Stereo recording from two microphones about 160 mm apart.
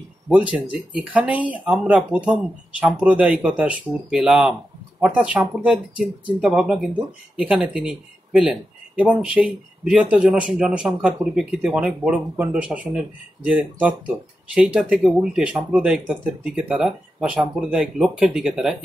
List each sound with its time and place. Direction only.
0.3 s speech: 10° right (ahead or behind)